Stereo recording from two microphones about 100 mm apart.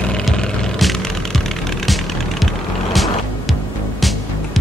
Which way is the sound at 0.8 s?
Centre (ahead or behind).